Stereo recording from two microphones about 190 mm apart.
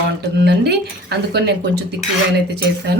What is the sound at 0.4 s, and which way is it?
A woman's voice, 60° right (ahead or behind).